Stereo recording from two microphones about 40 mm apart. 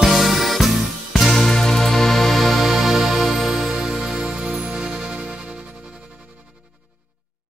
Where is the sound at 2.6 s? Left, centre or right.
Centre.